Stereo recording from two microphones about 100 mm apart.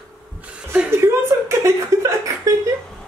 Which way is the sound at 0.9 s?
25° right (ahead or behind).